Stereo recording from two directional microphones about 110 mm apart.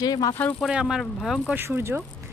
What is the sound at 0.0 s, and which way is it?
Speech, 35° left (ahead or behind).